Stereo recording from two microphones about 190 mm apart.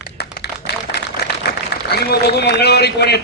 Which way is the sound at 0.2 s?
60° left (ahead or behind).